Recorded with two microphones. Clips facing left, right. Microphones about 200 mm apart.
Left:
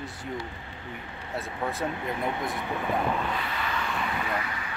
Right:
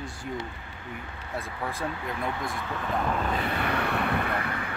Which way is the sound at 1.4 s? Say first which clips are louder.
Left 2 dB; 20° left (ahead or behind).